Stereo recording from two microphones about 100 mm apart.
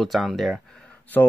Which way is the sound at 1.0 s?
20° left (ahead or behind).